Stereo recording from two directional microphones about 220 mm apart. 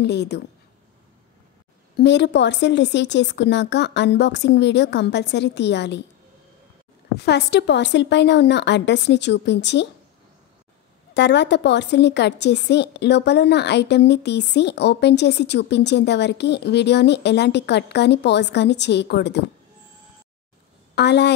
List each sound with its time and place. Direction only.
0.0 s a woman's voice: 50° left (ahead or behind)
2.0 s a woman's voice: 50° left (ahead or behind)
7.2 s a woman's voice: 50° left (ahead or behind)
11.1 s a woman's voice: 50° left (ahead or behind)
20.9 s a woman's voice: 50° left (ahead or behind)